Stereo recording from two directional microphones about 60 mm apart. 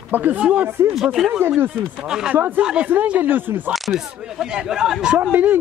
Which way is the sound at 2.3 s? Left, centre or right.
Right.